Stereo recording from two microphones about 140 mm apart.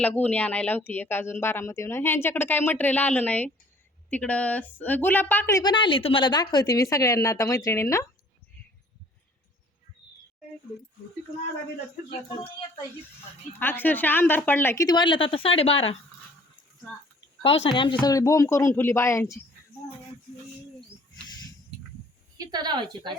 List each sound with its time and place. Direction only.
0.0 s speech: 10° left (ahead or behind)
13.6 s speech: 15° left (ahead or behind)
14.8 s speech: 35° left (ahead or behind)
17.4 s speech: 40° left (ahead or behind)
18.0 s speech: 25° left (ahead or behind)
21.2 s a sound: 30° left (ahead or behind)
22.5 s a woman's voice: 30° right (ahead or behind)